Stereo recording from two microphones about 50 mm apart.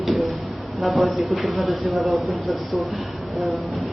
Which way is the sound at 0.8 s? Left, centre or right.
Centre.